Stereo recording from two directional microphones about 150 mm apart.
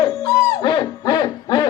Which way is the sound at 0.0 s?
30° left (ahead or behind).